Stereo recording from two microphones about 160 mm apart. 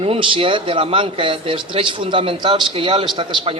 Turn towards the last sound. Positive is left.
turn(degrees=-30)  # may be behind; listen again after turning